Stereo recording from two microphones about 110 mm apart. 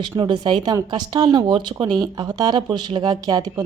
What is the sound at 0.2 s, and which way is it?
A woman's voice, 45° right (ahead or behind).